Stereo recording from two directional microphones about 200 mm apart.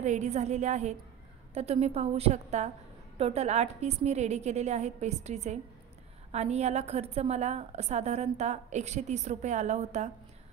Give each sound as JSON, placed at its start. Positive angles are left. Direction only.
{"t": 0.0, "sound": "a woman's voice", "side_deg": -35}